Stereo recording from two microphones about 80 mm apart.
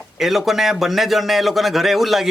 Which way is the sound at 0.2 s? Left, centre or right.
Centre.